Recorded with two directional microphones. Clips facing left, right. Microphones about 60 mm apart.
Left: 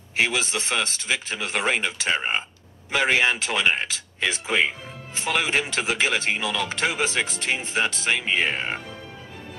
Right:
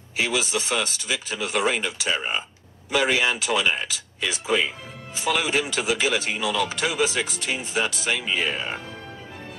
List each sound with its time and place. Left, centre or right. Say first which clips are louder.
0.1 s speech: left 1 dB; left